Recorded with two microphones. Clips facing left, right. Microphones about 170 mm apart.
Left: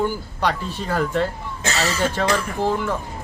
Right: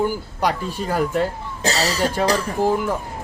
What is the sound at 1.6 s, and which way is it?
Speech, 35° right (ahead or behind).